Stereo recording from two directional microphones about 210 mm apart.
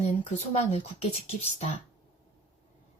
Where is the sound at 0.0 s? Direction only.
30° left (ahead or behind).